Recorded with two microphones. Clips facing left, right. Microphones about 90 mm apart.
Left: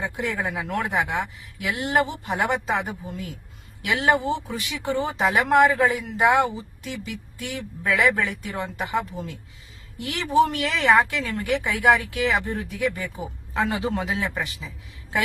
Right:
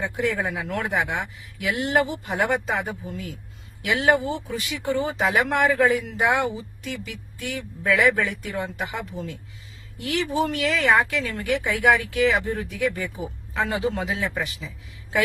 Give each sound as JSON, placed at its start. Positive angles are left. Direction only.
{"t": 0.2, "sound": "speech", "side_deg": 30}